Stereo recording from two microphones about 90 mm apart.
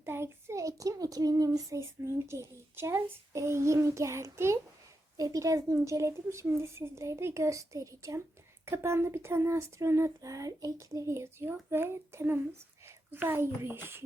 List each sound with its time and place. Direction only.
0.0 s a child's voice: 25° right (ahead or behind)